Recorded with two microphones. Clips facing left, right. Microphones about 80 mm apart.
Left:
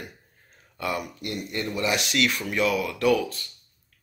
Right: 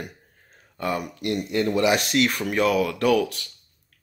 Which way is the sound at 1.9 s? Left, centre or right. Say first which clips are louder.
Right 3 dB; right.